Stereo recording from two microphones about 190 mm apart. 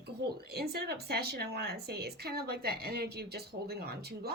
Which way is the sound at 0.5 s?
55° right (ahead or behind).